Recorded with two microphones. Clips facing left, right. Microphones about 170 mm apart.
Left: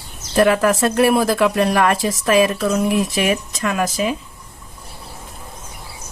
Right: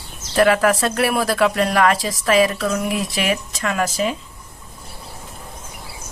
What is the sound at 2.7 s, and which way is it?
Speech, 25° left (ahead or behind).